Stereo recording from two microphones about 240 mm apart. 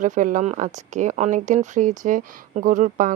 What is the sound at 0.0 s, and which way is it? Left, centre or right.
Speech, right.